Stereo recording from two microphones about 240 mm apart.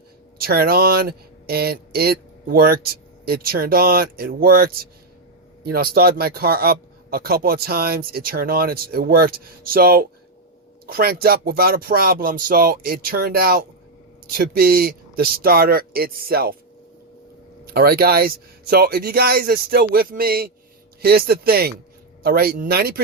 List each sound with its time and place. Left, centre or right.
0.3 s a man's voice: right
17.7 s a man's voice: right